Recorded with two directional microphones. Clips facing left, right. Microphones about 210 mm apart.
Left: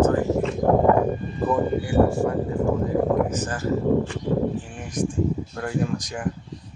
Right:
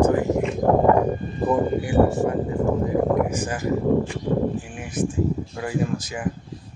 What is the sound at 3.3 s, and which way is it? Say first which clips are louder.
Speech: right 1 dB; 10° right (ahead or behind).